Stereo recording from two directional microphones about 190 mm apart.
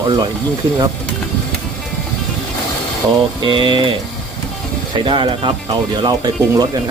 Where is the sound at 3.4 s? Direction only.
25° right (ahead or behind).